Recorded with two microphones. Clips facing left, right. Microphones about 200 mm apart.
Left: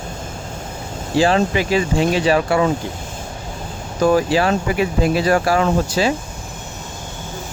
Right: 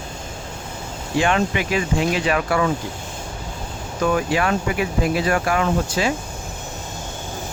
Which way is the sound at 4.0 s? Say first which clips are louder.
Left 5 dB; 35° left (ahead or behind).